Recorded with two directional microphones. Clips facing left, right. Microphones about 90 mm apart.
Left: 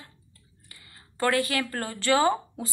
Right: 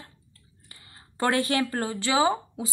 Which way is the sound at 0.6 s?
30° right (ahead or behind).